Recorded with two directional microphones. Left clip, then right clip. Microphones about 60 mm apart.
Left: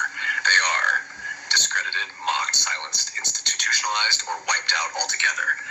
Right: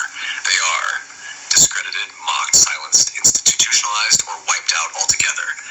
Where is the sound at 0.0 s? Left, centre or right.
Right.